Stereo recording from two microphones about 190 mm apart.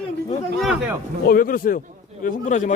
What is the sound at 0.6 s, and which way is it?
Speech, centre (ahead or behind).